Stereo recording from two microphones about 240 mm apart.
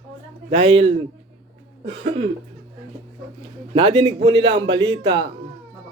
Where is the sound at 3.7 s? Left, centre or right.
Right.